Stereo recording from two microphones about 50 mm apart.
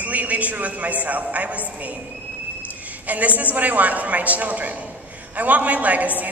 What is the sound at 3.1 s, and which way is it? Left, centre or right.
A man's voice, right.